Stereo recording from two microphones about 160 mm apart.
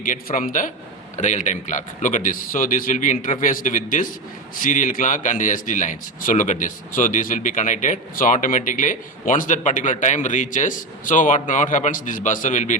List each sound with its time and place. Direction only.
0.0 s a man's voice: 60° left (ahead or behind)